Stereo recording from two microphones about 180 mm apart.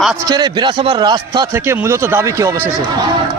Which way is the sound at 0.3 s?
25° right (ahead or behind).